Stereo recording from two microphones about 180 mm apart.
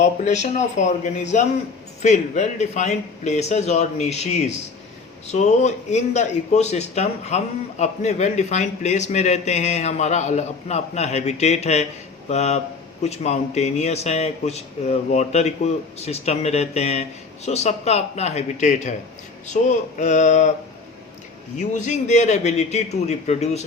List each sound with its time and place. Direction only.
0.0 s a man's voice: 40° left (ahead or behind)
21.6 s a man's voice: 40° left (ahead or behind)